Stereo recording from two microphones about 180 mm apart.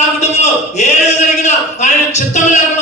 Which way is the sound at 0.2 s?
40° left (ahead or behind).